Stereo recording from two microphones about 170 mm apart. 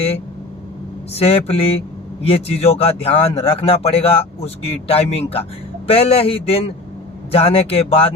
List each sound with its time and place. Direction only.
1.1 s speech: 35° left (ahead or behind)